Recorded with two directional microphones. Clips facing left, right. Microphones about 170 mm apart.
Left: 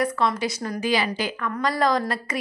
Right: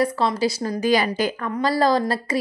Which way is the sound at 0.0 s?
30° right (ahead or behind).